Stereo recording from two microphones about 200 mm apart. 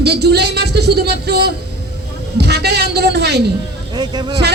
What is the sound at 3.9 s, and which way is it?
Speech, 20° right (ahead or behind).